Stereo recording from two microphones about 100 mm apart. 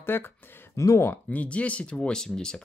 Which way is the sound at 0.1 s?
25° left (ahead or behind).